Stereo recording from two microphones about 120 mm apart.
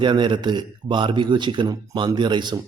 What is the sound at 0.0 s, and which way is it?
Speech, 40° right (ahead or behind).